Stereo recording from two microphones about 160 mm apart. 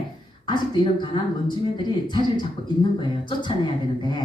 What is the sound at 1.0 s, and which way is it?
A woman's voice, 30° left (ahead or behind).